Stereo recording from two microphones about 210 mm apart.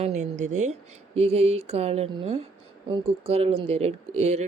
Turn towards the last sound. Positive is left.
turn(degrees=-30)  # may be behind; listen again after turning